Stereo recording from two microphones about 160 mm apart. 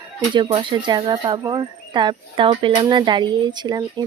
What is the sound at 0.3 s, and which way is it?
Speech, 30° right (ahead or behind).